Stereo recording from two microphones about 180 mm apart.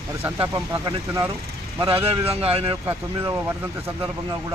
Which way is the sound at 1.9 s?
30° right (ahead or behind).